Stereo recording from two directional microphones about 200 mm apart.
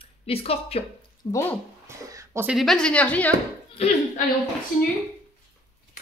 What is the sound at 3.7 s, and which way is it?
Speech, 35° left (ahead or behind).